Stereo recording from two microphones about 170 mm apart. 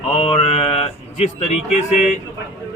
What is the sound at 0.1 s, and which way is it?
Mantra, 40° left (ahead or behind).